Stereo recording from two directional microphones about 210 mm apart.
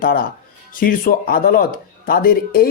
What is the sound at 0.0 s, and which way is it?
Speech, 40° left (ahead or behind).